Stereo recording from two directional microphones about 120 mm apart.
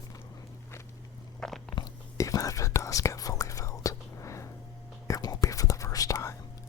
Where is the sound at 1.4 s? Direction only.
5° left (ahead or behind).